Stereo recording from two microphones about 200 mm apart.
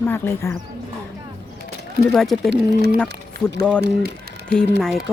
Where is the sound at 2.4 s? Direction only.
55° right (ahead or behind).